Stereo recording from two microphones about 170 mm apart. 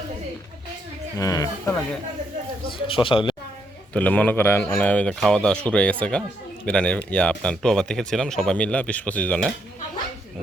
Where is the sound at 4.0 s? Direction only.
10° left (ahead or behind).